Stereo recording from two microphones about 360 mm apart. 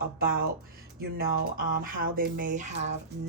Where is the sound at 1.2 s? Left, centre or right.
Right.